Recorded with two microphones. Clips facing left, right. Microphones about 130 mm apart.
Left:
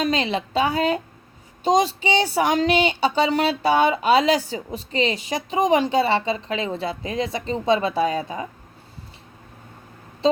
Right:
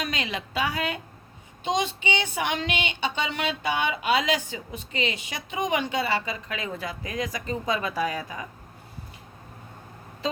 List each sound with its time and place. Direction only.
0.0 s speech: 30° left (ahead or behind)